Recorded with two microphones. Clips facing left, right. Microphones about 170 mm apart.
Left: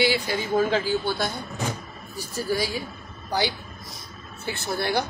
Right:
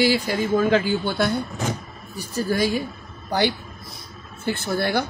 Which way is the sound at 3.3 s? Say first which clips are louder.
Right 4 dB; 55° right (ahead or behind).